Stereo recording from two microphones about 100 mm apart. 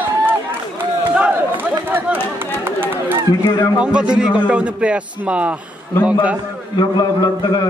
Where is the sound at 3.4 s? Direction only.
45° left (ahead or behind).